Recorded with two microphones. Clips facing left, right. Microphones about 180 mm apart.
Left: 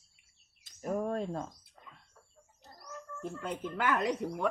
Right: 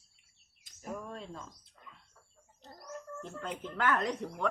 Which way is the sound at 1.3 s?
70° left (ahead or behind).